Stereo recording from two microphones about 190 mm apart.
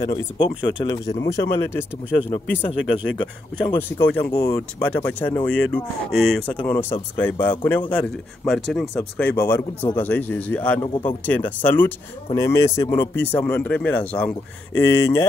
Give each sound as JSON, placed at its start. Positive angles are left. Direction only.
{"t": 0.0, "sound": "speech", "side_deg": 25}